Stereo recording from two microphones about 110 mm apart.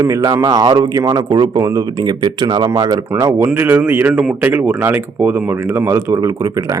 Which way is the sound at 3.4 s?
20° right (ahead or behind).